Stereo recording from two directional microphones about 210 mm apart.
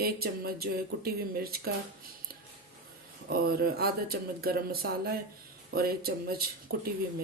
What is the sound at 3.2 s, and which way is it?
Speech, 45° right (ahead or behind).